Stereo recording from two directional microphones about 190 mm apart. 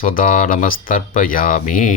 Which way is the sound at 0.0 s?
45° left (ahead or behind).